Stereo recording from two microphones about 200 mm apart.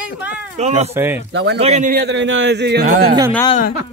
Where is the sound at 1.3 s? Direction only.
60° right (ahead or behind).